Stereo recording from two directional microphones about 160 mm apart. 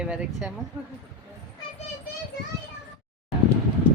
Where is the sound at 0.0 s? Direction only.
5° right (ahead or behind).